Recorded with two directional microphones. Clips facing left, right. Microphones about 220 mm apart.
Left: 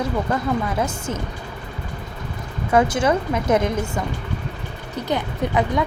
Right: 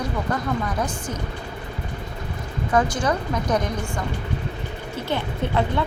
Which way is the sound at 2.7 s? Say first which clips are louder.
Left 4 dB; 25° left (ahead or behind).